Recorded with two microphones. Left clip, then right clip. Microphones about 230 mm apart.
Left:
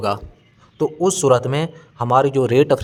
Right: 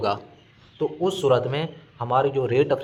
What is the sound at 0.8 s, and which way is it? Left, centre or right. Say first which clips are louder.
Speech: left 5 dB; left.